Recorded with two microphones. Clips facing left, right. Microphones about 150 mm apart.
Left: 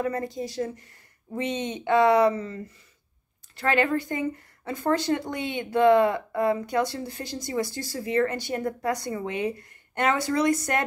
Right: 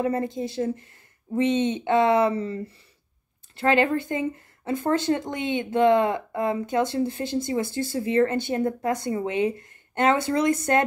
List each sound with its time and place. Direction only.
0.0 s speech: 25° right (ahead or behind)